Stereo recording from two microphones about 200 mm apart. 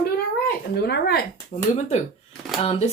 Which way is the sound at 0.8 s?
55° left (ahead or behind).